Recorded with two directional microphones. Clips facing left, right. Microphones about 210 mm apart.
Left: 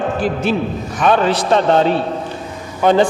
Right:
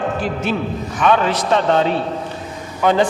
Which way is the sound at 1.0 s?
35° left (ahead or behind).